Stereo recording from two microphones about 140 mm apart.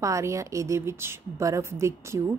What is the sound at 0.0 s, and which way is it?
Speech, 20° right (ahead or behind).